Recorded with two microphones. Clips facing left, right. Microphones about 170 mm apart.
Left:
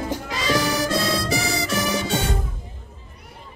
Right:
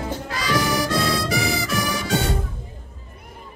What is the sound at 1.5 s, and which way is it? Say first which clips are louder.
Music: left 1 dB; 25° left (ahead or behind).